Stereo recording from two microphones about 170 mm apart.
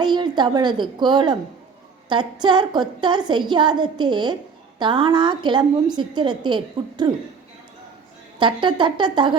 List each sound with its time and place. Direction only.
0.0 s a woman's voice: 25° right (ahead or behind)
8.4 s a woman's voice: 30° right (ahead or behind)